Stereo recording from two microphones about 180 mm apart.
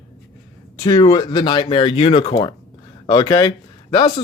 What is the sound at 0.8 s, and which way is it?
Speech, 20° left (ahead or behind).